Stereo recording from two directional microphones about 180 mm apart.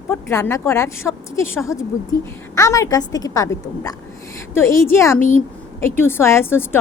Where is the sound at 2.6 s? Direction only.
15° left (ahead or behind).